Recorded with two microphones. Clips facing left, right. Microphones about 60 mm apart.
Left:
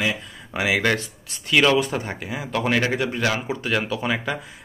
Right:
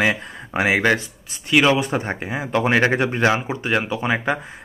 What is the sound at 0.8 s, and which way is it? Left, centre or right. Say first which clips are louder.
Speech: right 3 dB; centre.